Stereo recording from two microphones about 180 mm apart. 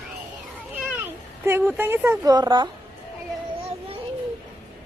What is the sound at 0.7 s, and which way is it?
Cat, 10° right (ahead or behind).